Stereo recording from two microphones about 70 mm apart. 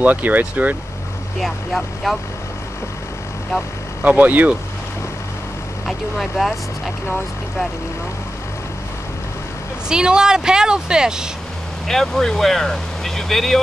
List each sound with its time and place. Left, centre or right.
0.0 s speech: right
1.4 s speech: centre
4.0 s speech: right
5.9 s speech: centre
9.8 s a woman's voice: centre
11.9 s speech: centre